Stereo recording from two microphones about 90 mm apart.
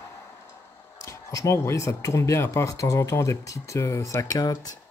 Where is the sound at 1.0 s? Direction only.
35° left (ahead or behind).